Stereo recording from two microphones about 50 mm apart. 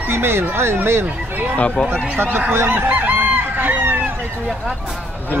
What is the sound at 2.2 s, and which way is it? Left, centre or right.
Speech, right.